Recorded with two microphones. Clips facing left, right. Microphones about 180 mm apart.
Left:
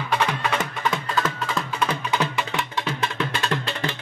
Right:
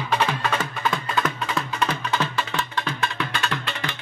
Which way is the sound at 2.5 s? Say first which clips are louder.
Left 1 dB; 20° left (ahead or behind).